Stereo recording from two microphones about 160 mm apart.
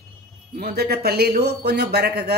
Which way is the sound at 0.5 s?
75° right (ahead or behind).